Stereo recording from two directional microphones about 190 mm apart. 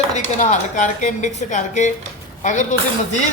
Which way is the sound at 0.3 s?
40° left (ahead or behind).